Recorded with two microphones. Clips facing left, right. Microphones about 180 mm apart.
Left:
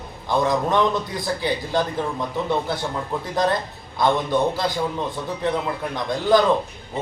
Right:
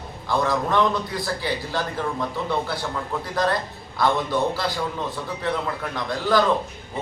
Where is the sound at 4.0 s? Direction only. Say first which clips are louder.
Left 2 dB; 20° left (ahead or behind).